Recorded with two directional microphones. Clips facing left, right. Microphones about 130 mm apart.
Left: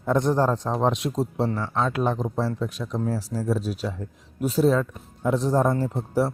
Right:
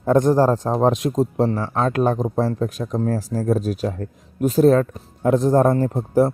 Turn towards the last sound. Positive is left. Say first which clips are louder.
# right 6 dB
turn(degrees=-50)  # may be behind; listen again after turning